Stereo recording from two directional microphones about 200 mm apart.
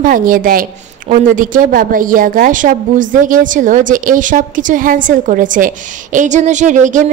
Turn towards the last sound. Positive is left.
turn(degrees=-40)  # may be behind; listen again after turning